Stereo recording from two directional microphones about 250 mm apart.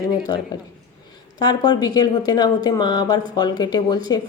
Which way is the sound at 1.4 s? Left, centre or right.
Centre.